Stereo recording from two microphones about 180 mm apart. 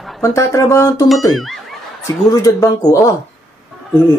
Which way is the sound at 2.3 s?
20° left (ahead or behind).